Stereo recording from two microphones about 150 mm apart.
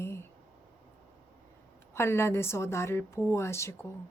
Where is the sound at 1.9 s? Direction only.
15° left (ahead or behind).